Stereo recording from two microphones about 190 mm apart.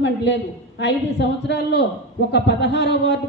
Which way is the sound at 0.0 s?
65° left (ahead or behind).